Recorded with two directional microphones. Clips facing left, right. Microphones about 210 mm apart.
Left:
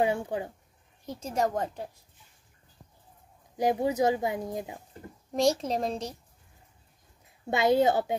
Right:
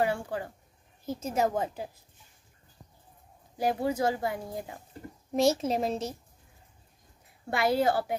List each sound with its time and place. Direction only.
0.0 s speech: 20° left (ahead or behind)
1.0 s a woman's voice: 5° right (ahead or behind)
3.5 s speech: 20° left (ahead or behind)
5.3 s a woman's voice: 5° right (ahead or behind)
7.4 s speech: 20° left (ahead or behind)